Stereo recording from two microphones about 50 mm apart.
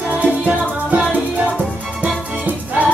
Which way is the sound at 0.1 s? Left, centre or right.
Right.